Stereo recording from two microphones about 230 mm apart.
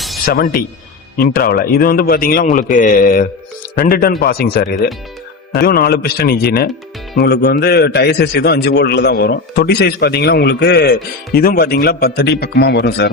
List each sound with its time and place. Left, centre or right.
0.3 s a man's voice: left